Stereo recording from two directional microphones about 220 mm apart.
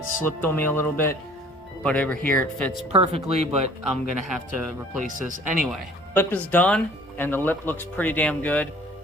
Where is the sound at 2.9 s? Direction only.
30° right (ahead or behind).